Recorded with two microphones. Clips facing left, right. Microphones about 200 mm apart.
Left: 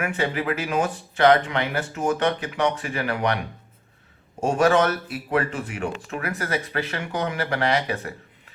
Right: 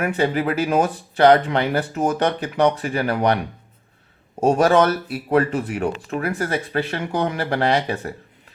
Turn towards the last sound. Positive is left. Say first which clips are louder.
# right 3 dB
turn(degrees=-30)  # may be behind; listen again after turning